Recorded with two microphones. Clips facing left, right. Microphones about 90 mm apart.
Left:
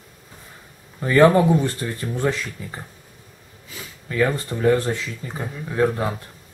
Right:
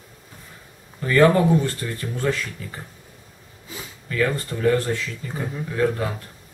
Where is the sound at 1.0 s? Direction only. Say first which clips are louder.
Left 2 dB; 20° left (ahead or behind).